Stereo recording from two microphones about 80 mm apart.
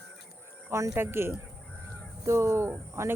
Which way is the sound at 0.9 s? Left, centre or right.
Right.